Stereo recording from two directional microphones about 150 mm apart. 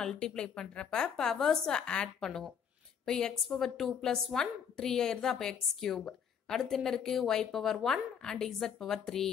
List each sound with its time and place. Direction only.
0.0 s a woman's voice: 5° left (ahead or behind)